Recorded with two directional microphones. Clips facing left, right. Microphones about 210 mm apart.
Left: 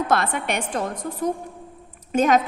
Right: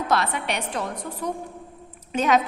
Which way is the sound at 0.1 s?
50° left (ahead or behind).